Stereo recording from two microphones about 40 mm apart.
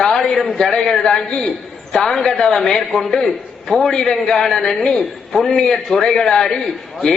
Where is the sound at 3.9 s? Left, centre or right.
Centre.